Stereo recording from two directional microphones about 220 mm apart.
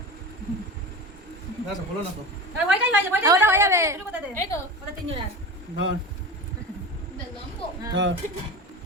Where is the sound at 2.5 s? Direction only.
10° right (ahead or behind).